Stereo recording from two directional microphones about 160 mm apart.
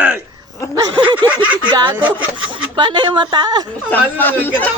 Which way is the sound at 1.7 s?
30° right (ahead or behind).